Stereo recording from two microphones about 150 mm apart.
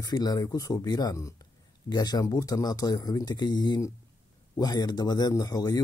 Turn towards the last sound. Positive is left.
turn(degrees=25)  # may be behind; listen again after turning